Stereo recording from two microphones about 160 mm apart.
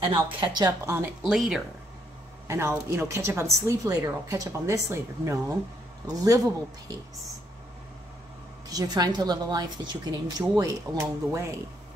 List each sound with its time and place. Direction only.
0.1 s speech: 25° right (ahead or behind)
1.2 s speech: centre (ahead or behind)
2.4 s a woman's voice: 15° right (ahead or behind)
8.6 s speech: 25° right (ahead or behind)